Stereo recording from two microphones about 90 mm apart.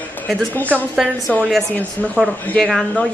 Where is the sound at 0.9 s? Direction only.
5° right (ahead or behind).